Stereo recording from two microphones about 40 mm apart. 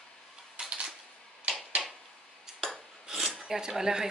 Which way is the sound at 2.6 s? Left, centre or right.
Centre.